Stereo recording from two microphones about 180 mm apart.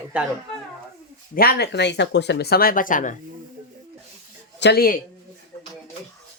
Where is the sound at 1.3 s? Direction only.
60° left (ahead or behind).